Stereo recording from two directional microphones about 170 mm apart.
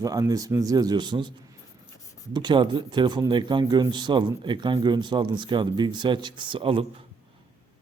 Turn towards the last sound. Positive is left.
turn(degrees=-30)  # may be behind; listen again after turning